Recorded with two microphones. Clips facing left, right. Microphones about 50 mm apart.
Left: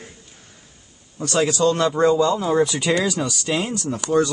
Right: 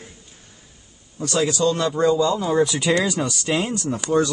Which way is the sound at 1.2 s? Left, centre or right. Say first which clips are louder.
Left 1 dB; left.